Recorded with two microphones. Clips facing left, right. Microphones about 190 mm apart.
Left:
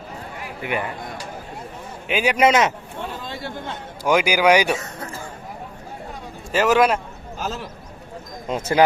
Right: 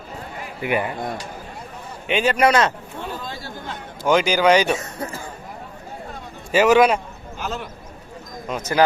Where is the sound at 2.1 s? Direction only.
10° left (ahead or behind).